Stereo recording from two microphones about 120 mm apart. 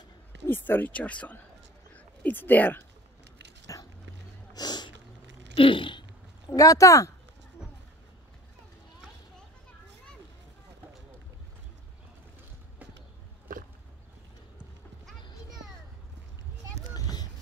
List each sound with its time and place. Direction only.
0.5 s speech: 15° left (ahead or behind)
3.7 s dog: 30° left (ahead or behind)
4.6 s sneeze: 35° left (ahead or behind)
5.6 s speech: 45° left (ahead or behind); by 7.1 s 25° left (ahead or behind)
16.9 s a sound: 35° left (ahead or behind)